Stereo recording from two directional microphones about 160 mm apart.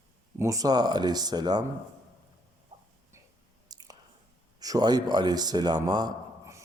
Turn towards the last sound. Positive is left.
turn(degrees=-20)  # may be behind; listen again after turning